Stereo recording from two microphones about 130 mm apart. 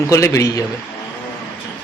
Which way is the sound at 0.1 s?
25° left (ahead or behind).